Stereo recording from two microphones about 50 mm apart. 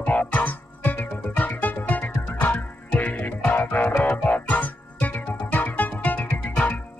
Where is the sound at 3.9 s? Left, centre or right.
Left.